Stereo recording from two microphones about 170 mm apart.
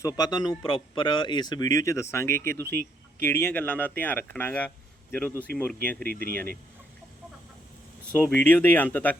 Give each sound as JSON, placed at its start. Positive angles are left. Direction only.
{"t": 0.0, "sound": "speech", "side_deg": 25}
{"t": 6.0, "sound": "speech", "side_deg": -60}
{"t": 8.3, "sound": "speech", "side_deg": 10}